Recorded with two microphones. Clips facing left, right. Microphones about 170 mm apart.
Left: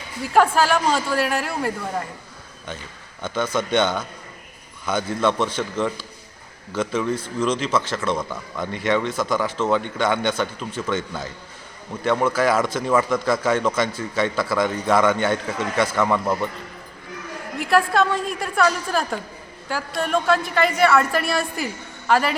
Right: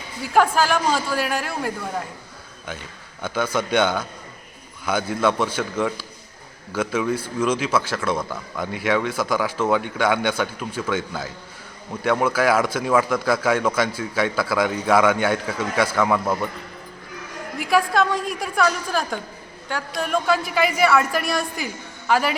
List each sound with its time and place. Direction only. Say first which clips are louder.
0.2 s a woman's voice: left 1 dB; centre (ahead or behind)
3.2 s a woman's voice: even; 10° right (ahead or behind)
17.6 s a woman's voice: left 1 dB; centre (ahead or behind)